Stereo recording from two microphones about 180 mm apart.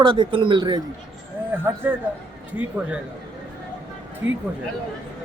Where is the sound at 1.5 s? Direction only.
10° right (ahead or behind).